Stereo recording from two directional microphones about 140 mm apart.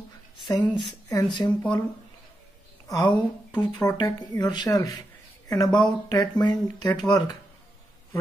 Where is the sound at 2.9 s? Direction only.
30° left (ahead or behind).